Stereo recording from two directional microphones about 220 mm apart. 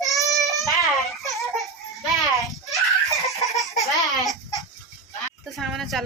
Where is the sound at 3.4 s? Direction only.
Centre (ahead or behind).